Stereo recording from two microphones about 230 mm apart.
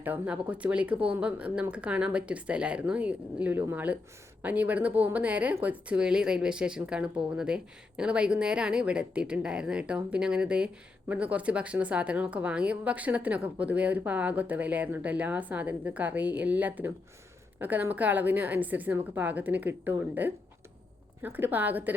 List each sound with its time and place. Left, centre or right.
0.0 s a woman's voice: centre